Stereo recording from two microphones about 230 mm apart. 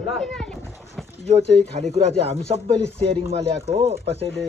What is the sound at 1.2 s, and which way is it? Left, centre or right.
Speech, right.